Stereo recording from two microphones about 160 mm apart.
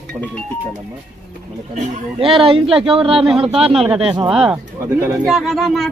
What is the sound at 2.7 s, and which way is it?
Speech, 5° right (ahead or behind).